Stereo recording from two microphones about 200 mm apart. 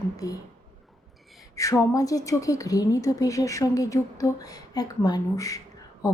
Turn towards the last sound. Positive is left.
turn(degrees=20)  # may be behind; listen again after turning